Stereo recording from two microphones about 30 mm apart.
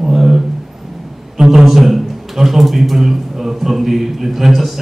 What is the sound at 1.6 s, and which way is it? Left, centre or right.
A man's voice, centre.